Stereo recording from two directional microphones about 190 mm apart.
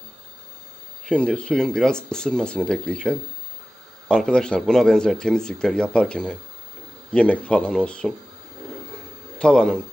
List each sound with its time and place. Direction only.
1.0 s a man's voice: 5° left (ahead or behind)
9.4 s a man's voice: 5° left (ahead or behind)